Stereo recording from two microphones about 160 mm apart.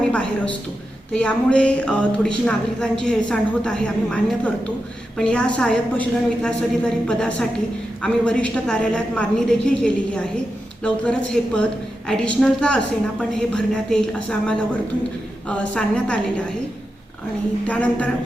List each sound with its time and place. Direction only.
0.1 s a sound: 5° left (ahead or behind)
1.1 s a woman's voice: 5° left (ahead or behind)
17.7 s a woman's voice: 10° left (ahead or behind)